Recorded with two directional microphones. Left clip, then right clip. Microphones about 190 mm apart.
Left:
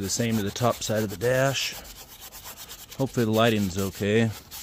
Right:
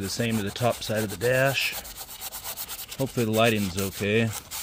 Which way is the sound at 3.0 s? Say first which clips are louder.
Even; 25° left (ahead or behind).